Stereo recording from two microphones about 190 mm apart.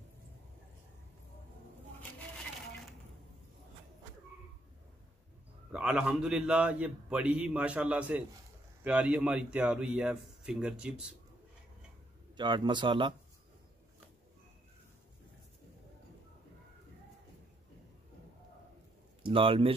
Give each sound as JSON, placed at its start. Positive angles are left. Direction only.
{"t": 5.7, "sound": "a man's voice", "side_deg": -5}
{"t": 12.4, "sound": "speech", "side_deg": -25}
{"t": 19.2, "sound": "speech", "side_deg": -30}